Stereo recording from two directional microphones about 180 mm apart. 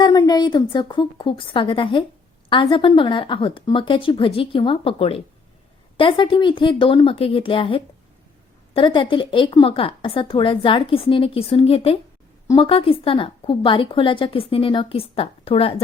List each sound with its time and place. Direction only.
0.0 s a woman's voice: 20° left (ahead or behind)